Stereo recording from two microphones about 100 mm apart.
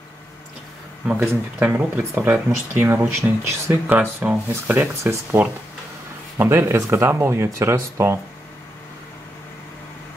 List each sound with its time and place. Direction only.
1.2 s speech: 20° right (ahead or behind)
5.0 s speech: 30° right (ahead or behind)